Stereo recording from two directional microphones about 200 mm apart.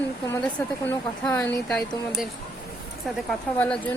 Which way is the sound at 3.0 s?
5° left (ahead or behind).